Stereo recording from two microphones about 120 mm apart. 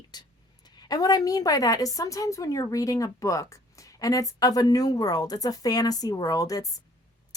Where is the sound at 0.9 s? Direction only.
30° left (ahead or behind).